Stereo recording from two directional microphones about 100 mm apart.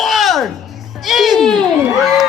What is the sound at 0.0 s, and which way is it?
Music, centre (ahead or behind).